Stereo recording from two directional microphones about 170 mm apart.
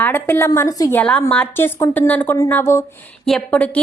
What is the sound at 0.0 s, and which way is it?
Speech, 10° left (ahead or behind).